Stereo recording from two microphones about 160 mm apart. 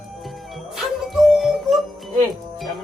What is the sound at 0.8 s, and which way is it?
Music, centre (ahead or behind).